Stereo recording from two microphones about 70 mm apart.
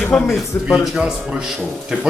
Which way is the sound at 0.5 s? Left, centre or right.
Left.